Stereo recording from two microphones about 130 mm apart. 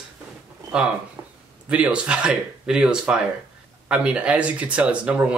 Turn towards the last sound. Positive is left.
turn(degrees=-10)  # may be behind; listen again after turning